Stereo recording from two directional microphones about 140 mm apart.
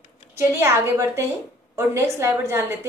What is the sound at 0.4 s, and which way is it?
A woman's voice, 20° right (ahead or behind).